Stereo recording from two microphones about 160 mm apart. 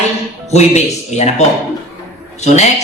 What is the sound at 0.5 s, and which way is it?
A man's voice, 45° left (ahead or behind).